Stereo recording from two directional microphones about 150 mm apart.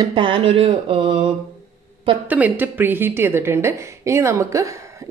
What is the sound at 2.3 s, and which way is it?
A woman's voice, 10° right (ahead or behind).